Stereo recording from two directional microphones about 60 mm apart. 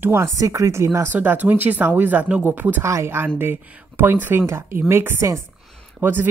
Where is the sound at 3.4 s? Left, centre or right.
Right.